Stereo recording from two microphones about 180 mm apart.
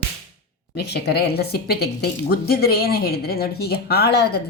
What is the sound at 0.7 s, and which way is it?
A woman's voice, 65° left (ahead or behind).